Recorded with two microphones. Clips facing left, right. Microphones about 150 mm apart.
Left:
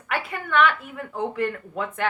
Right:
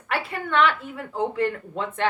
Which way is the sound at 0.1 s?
30° right (ahead or behind).